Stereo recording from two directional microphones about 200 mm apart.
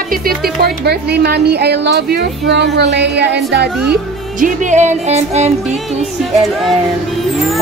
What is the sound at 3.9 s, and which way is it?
Music, 40° right (ahead or behind).